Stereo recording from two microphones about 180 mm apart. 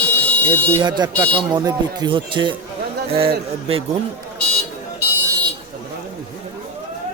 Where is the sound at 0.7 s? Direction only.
25° right (ahead or behind).